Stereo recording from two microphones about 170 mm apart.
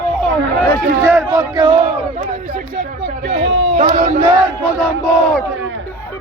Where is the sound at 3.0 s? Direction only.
90° right.